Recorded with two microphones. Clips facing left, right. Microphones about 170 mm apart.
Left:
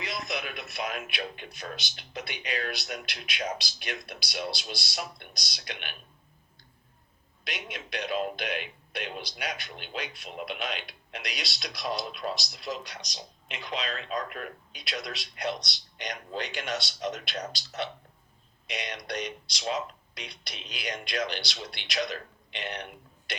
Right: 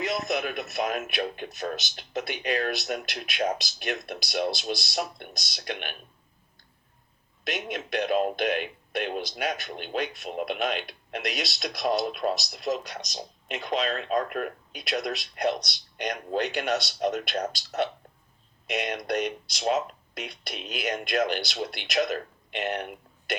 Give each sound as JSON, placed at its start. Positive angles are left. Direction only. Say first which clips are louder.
{"t": 0.0, "sound": "a man's voice", "louder": "right 7 dB", "side_deg": -45}
{"t": 7.4, "sound": "a man's voice", "louder": "right 7 dB", "side_deg": -45}
{"t": 18.7, "sound": "a man's voice", "louder": "right 7 dB", "side_deg": -55}